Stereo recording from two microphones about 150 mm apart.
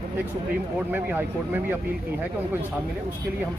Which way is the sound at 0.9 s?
10° right (ahead or behind).